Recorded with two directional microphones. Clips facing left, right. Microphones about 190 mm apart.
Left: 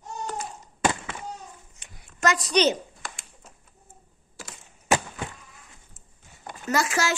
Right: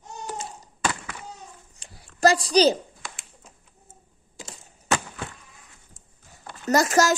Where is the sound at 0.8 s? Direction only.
25° left (ahead or behind).